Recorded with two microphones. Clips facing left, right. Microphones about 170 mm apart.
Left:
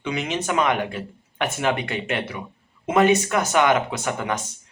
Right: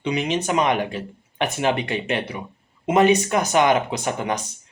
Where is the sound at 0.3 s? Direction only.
20° right (ahead or behind).